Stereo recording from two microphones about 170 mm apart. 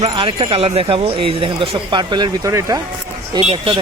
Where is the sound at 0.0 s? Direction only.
30° right (ahead or behind).